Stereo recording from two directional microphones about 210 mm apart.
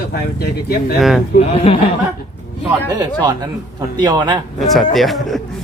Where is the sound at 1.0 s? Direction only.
Centre (ahead or behind).